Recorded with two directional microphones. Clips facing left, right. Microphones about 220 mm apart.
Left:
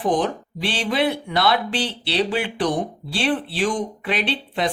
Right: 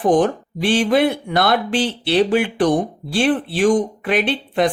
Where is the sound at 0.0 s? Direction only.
50° right (ahead or behind).